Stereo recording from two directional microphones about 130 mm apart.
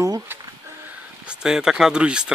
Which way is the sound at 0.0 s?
25° right (ahead or behind).